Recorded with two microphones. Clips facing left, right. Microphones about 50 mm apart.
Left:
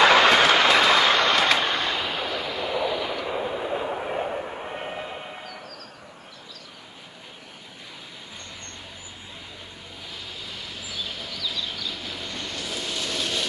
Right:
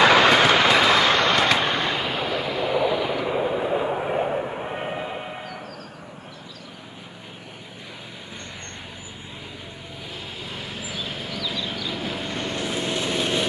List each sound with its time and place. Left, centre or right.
0.0 s vehicle: centre
10.4 s vehicle: right